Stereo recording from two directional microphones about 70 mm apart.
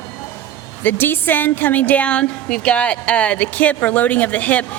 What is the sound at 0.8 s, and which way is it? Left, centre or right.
A woman's voice, left.